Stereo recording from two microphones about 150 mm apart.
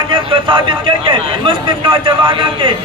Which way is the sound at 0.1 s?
35° right (ahead or behind).